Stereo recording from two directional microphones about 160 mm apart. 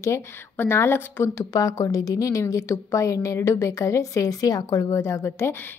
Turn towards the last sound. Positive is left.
turn(degrees=15)  # may be behind; listen again after turning